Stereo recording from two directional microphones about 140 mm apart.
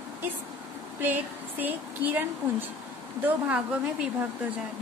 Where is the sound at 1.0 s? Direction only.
15° right (ahead or behind).